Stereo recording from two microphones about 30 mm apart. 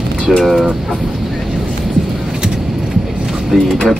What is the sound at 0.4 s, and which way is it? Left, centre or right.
Speech, centre.